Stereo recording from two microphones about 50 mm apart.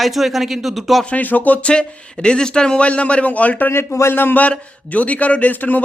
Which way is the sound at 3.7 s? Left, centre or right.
Left.